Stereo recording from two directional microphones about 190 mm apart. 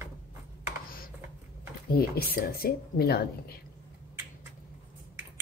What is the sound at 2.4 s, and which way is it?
A woman's voice, 50° left (ahead or behind).